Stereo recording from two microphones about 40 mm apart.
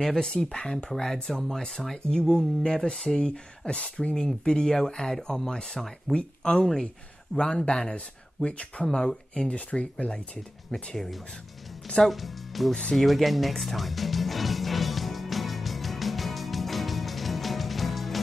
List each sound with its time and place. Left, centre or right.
0.0 s speech: centre
3.2 s speech: left
8.5 s speech: left
8.8 s speech: centre; by 10.1 s left
10.7 s speech: centre
12.0 s speech: centre
12.9 s music: centre